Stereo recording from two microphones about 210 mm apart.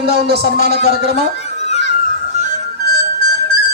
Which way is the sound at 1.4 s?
30° left (ahead or behind).